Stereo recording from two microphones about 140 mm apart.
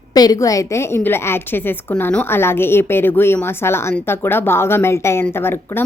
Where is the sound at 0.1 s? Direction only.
25° left (ahead or behind).